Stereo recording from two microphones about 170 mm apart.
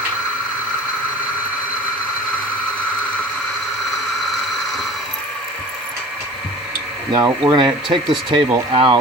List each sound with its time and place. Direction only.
7.1 s speech: 25° right (ahead or behind)